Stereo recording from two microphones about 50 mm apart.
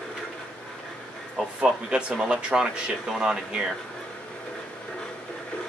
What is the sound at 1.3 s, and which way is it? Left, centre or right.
A man's voice, centre.